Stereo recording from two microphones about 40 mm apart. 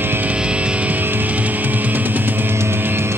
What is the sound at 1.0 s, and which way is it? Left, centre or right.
Music, right.